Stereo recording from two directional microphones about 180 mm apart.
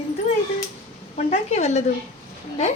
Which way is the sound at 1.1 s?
35° left (ahead or behind).